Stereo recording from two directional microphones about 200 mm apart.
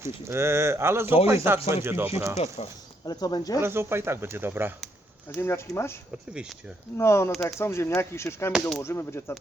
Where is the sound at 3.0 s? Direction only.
20° left (ahead or behind).